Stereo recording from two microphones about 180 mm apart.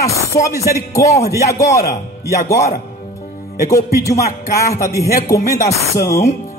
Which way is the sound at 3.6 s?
15° left (ahead or behind).